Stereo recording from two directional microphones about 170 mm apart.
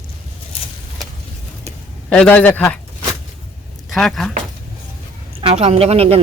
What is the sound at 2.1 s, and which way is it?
Speech, 10° left (ahead or behind).